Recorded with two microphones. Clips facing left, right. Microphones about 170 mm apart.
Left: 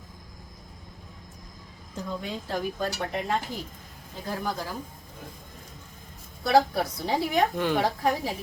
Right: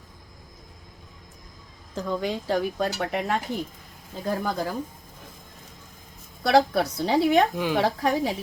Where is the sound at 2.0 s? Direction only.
85° right; by 3.3 s 70° right (ahead or behind).